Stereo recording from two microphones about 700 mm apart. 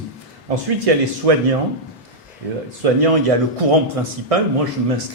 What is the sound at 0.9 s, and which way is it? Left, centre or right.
Speech, right.